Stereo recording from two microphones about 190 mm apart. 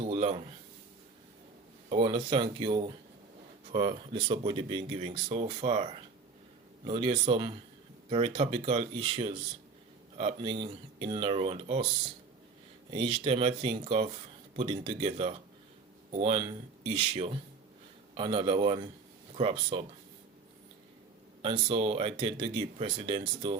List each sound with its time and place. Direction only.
0.0 s a sound: 30° right (ahead or behind)
1.9 s speech: 25° right (ahead or behind)
12.9 s speech: 30° right (ahead or behind)
21.4 s speech: 25° right (ahead or behind)